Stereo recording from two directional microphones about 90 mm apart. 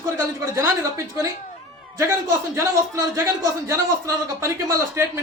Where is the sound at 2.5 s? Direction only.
30° right (ahead or behind).